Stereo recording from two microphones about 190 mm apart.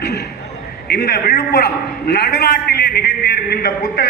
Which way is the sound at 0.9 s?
60° left (ahead or behind).